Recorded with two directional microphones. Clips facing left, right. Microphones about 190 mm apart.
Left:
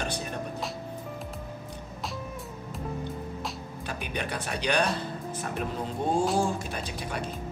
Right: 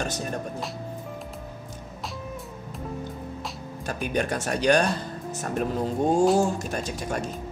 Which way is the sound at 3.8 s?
45° right (ahead or behind).